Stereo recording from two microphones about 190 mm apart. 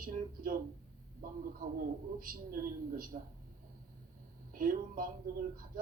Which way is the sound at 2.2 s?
50° right (ahead or behind).